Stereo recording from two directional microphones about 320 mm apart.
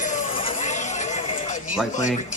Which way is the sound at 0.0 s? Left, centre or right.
Left.